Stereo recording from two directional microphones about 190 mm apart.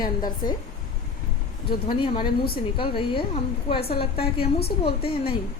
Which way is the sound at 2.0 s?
25° left (ahead or behind).